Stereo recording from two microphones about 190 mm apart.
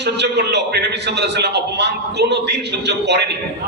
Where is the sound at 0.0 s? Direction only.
65° right (ahead or behind).